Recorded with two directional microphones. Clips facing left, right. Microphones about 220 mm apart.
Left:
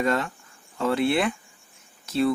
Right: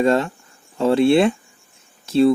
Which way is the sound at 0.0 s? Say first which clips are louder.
Right 7 dB; 25° right (ahead or behind).